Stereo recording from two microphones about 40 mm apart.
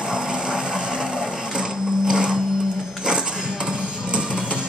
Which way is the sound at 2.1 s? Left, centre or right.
Centre.